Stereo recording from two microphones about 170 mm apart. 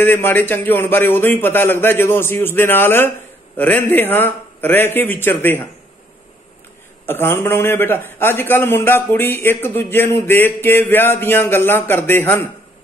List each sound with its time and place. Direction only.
0.0 s a man's voice: 10° left (ahead or behind)
7.1 s a man's voice: 15° left (ahead or behind)